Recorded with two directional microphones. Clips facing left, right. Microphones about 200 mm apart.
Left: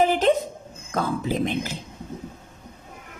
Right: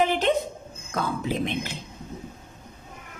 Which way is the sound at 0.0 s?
40° left (ahead or behind).